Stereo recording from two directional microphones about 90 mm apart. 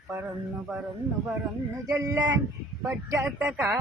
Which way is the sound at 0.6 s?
10° right (ahead or behind).